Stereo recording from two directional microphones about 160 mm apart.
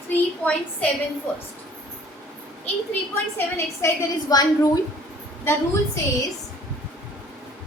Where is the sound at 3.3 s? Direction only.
15° left (ahead or behind).